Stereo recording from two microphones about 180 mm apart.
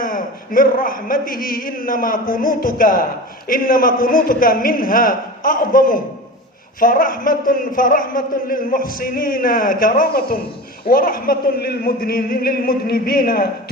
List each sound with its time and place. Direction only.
0.0 s a man's voice: 50° left (ahead or behind)